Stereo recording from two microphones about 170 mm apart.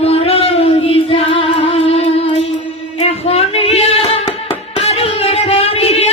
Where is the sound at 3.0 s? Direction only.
35° left (ahead or behind).